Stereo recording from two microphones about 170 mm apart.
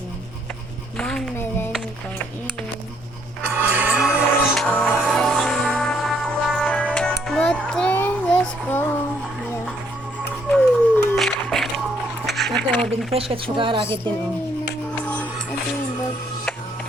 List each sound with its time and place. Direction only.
0.9 s speech: 5° left (ahead or behind)
3.5 s music: 10° right (ahead or behind); by 9.0 s 10° left (ahead or behind)
10.5 s a sound: 10° left (ahead or behind)
12.8 s speech: centre (ahead or behind)
13.1 s speech: 35° right (ahead or behind)
14.9 s music: 10° left (ahead or behind)